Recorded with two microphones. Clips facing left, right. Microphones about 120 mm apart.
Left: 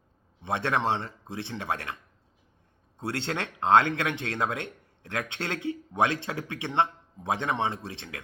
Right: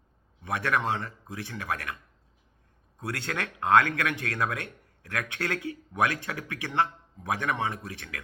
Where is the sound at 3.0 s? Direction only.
25° left (ahead or behind).